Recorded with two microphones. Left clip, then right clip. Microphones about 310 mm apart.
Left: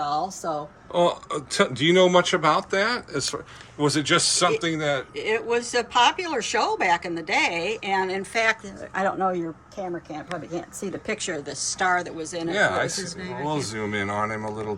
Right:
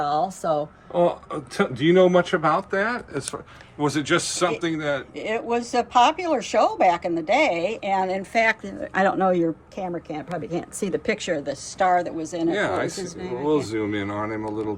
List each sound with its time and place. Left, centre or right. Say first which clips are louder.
0.0 s a sound: right 3 dB; right
0.9 s speech: even; centre
5.2 s speech: left 1 dB; centre
12.5 s speech: left 2 dB; centre